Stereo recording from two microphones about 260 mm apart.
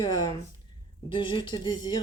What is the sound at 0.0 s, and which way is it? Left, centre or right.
Speech, centre.